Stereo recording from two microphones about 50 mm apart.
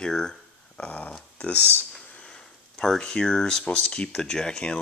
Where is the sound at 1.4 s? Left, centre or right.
Left.